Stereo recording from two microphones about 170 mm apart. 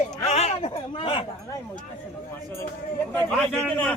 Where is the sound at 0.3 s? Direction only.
40° left (ahead or behind).